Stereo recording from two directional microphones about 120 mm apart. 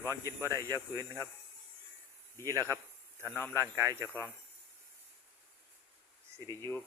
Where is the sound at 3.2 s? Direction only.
15° left (ahead or behind).